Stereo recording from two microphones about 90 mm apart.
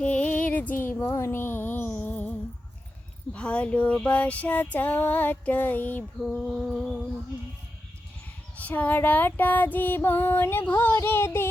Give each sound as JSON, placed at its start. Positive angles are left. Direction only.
{"t": 0.0, "sound": "music", "side_deg": 15}
{"t": 3.3, "sound": "female singing", "side_deg": 15}
{"t": 6.2, "sound": "a sound", "side_deg": 0}
{"t": 8.5, "sound": "female singing", "side_deg": 20}